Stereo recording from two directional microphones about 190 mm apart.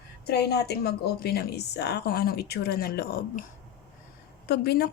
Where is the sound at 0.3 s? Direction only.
60° left (ahead or behind).